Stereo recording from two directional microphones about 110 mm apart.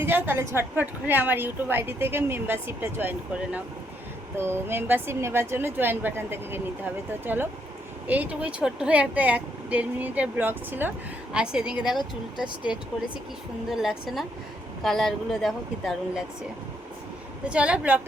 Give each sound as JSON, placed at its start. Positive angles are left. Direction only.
{"t": 0.0, "sound": "a woman's voice", "side_deg": -20}
{"t": 13.7, "sound": "speech", "side_deg": -5}
{"t": 17.5, "sound": "speech", "side_deg": -10}